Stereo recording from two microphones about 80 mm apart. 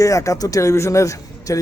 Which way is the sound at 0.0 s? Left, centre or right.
Left.